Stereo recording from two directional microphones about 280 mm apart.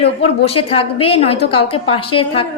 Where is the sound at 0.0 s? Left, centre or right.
Left.